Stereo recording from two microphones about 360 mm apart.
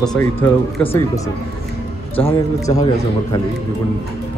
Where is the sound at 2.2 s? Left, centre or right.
Centre.